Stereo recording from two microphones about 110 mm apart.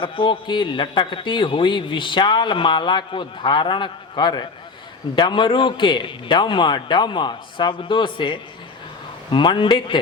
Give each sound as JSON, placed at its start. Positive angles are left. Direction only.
{"t": 0.0, "sound": "a man's voice", "side_deg": 50}